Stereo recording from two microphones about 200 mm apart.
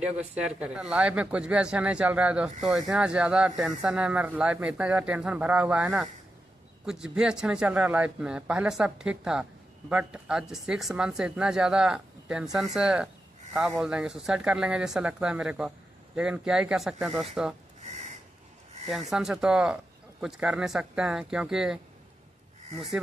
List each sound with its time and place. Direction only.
0.3 s speech: 5° right (ahead or behind)
17.8 s owl: 35° right (ahead or behind)
18.9 s speech: centre (ahead or behind)